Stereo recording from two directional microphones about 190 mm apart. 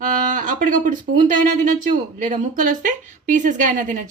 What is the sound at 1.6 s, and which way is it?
A woman's voice, 40° right (ahead or behind).